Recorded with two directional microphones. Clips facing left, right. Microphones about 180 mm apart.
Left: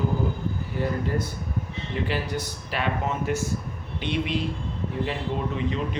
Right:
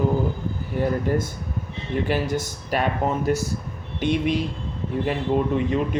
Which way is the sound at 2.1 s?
45° right (ahead or behind).